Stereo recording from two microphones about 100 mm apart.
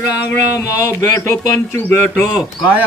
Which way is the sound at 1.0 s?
30° left (ahead or behind).